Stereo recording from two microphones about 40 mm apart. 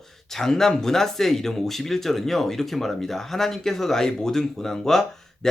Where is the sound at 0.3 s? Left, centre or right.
Centre.